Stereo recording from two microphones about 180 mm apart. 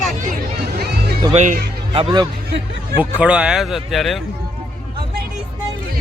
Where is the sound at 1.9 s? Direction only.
25° right (ahead or behind).